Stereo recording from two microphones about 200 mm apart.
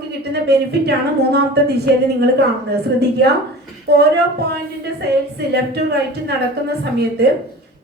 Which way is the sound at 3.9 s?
55° right (ahead or behind).